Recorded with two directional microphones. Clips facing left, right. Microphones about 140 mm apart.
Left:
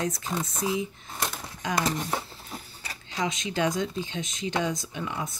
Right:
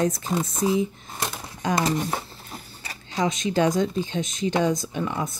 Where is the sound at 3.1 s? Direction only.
40° right (ahead or behind).